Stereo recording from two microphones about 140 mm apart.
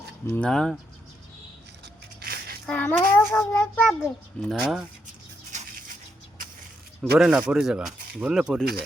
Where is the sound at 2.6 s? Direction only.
10° left (ahead or behind).